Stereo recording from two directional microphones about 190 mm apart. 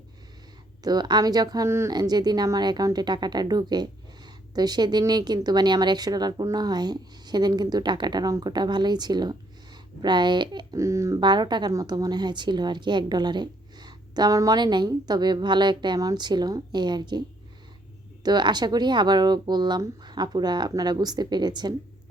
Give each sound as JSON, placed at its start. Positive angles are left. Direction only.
{"t": 0.9, "sound": "speech", "side_deg": -20}